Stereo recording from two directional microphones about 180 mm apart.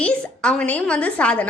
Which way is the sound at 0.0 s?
5° left (ahead or behind).